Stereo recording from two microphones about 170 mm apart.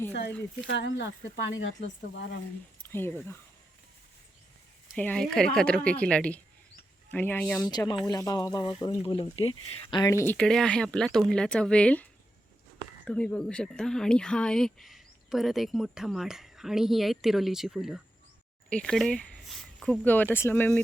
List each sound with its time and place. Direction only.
0.7 s speech: 90° left
2.9 s a woman's voice: 15° left (ahead or behind)
4.9 s a woman's voice: 5° left (ahead or behind)
7.7 s speech: 25° left (ahead or behind)
10.1 s a woman's voice: 15° left (ahead or behind)
10.3 s speech: 5° left (ahead or behind)
13.1 s speech: 5° left (ahead or behind)